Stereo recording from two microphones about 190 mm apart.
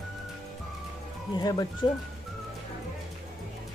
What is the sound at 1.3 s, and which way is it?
Speech, 20° left (ahead or behind).